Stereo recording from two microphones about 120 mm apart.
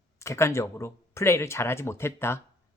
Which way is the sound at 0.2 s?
25° left (ahead or behind).